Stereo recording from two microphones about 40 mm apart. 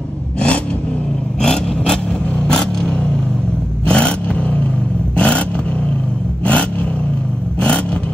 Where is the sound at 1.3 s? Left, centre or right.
Centre.